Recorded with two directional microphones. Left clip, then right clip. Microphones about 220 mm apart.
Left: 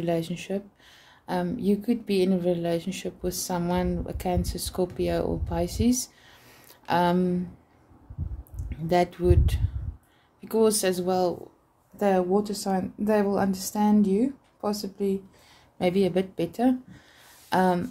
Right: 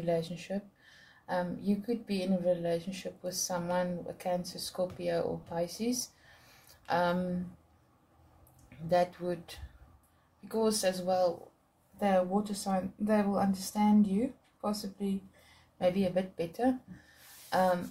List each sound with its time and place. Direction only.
0.0 s speech: 40° left (ahead or behind)
8.8 s speech: 40° left (ahead or behind)